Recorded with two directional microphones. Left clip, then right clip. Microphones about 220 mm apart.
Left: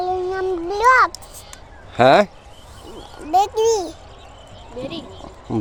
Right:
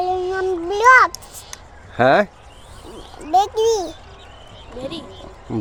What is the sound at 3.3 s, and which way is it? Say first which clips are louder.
Speech: even; 5° left (ahead or behind).